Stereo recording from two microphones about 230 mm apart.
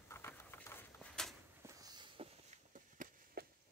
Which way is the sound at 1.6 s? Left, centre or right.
Centre.